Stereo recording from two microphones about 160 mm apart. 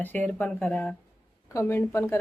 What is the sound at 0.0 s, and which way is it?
Speech, 10° left (ahead or behind).